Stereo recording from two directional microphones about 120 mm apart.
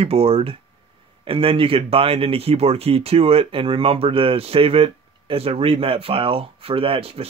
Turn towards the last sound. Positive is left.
turn(degrees=-55)  # may be behind; listen again after turning